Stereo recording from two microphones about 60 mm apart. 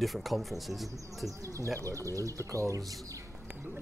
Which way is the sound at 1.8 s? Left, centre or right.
Right.